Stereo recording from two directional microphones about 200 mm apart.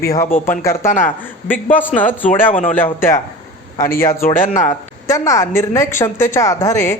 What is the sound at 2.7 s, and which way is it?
Speech, 10° left (ahead or behind).